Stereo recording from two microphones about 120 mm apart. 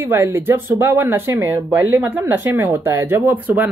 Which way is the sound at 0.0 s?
20° right (ahead or behind).